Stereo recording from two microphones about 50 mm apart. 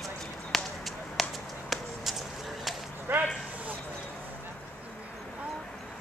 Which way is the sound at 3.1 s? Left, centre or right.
Right.